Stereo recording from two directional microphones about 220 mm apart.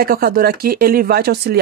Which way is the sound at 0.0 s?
40° right (ahead or behind).